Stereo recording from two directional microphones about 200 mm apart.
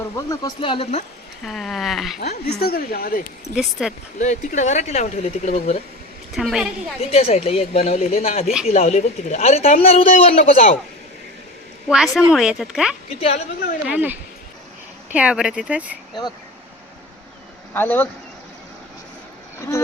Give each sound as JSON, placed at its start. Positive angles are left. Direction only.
{"t": 0.3, "sound": "speech", "side_deg": 20}
{"t": 1.5, "sound": "speech", "side_deg": 0}
{"t": 2.1, "sound": "a woman's voice", "side_deg": 50}
{"t": 3.5, "sound": "speech", "side_deg": -5}
{"t": 4.2, "sound": "speech", "side_deg": 40}
{"t": 6.3, "sound": "speech", "side_deg": 0}
{"t": 7.1, "sound": "speech", "side_deg": 30}
{"t": 8.4, "sound": "speech", "side_deg": 0}
{"t": 8.7, "sound": "speech", "side_deg": 35}
{"t": 11.9, "sound": "speech", "side_deg": 0}
{"t": 13.1, "sound": "speech", "side_deg": 30}
{"t": 13.8, "sound": "speech", "side_deg": -10}
{"t": 17.7, "sound": "speech", "side_deg": 10}